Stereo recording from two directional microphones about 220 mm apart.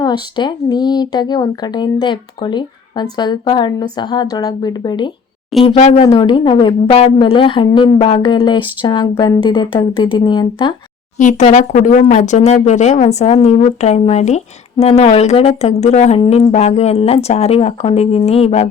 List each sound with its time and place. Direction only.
0.0 s speech: 20° left (ahead or behind)
11.2 s speech: 35° left (ahead or behind)